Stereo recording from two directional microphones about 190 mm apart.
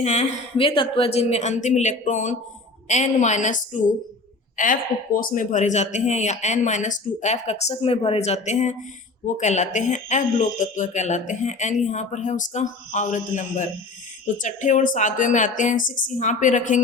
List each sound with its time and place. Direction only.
0.0 s speech: 35° left (ahead or behind)